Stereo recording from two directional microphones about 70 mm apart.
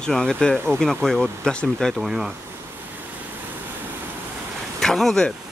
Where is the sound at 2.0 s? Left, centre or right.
Centre.